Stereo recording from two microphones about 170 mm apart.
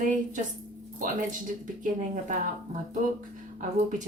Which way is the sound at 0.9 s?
50° right (ahead or behind).